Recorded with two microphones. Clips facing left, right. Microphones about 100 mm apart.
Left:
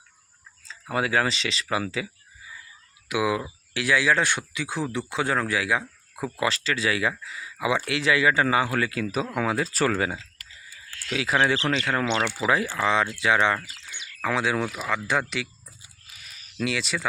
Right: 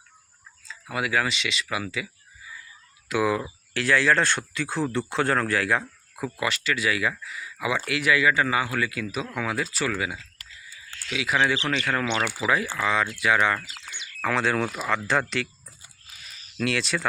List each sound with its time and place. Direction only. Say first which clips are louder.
0.7 s speech: left 2 dB; 30° left (ahead or behind)
3.1 s speech: right 1 dB; 10° left (ahead or behind)
6.1 s speech: left 2 dB; 25° left (ahead or behind)
9.7 s speech: left 4 dB; 45° left (ahead or behind); by 13.6 s 25° left (ahead or behind)
13.6 s speech: right 1 dB; 15° left (ahead or behind)
16.6 s speech: right 1 dB; 5° left (ahead or behind)